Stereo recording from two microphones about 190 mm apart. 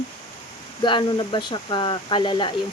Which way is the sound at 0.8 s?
25° left (ahead or behind).